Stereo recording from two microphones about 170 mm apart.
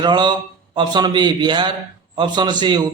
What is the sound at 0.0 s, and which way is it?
A man's voice, 25° right (ahead or behind).